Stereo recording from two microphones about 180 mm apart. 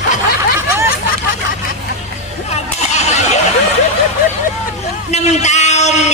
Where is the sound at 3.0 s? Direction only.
40° left (ahead or behind).